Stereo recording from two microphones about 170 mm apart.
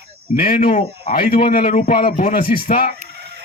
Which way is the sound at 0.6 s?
45° left (ahead or behind).